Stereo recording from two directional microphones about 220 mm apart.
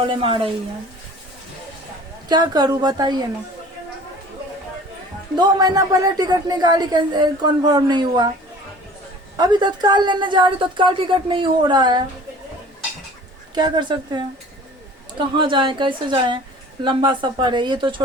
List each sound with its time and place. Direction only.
0.1 s speech: 25° right (ahead or behind)
2.3 s speech: 20° right (ahead or behind)
5.4 s speech: 15° right (ahead or behind)
9.4 s speech: 20° right (ahead or behind)
13.5 s speech: 20° right (ahead or behind)
15.4 s speech: 20° right (ahead or behind)